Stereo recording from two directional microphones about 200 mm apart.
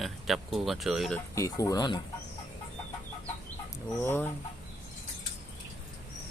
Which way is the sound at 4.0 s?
10° left (ahead or behind).